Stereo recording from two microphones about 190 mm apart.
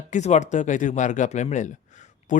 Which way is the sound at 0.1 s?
40° left (ahead or behind).